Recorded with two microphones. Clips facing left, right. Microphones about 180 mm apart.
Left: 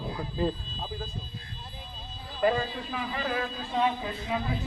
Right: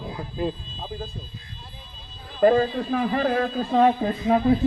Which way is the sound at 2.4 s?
45° right (ahead or behind).